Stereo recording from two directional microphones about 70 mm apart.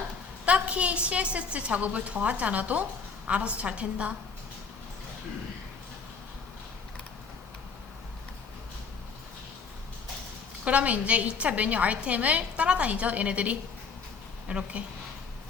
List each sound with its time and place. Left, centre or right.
0.4 s a woman's voice: centre
10.6 s a woman's voice: centre